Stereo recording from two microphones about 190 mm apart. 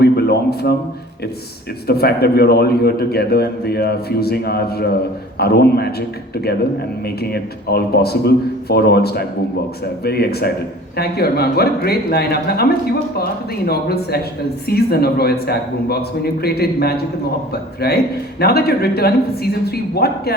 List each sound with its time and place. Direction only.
0.0 s a sound: 55° left (ahead or behind)
1.9 s a man's voice: 55° left (ahead or behind)
13.7 s a man's voice: 55° left (ahead or behind)